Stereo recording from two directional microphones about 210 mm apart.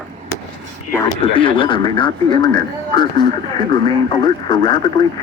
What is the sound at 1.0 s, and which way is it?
A man's voice, 25° left (ahead or behind).